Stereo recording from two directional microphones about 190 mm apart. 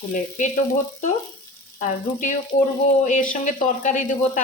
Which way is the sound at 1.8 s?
45° left (ahead or behind).